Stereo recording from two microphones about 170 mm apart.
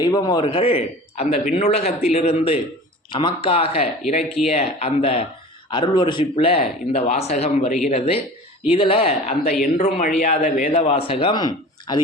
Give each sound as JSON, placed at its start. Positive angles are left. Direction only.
{"t": 0.0, "sound": "a man's voice", "side_deg": 25}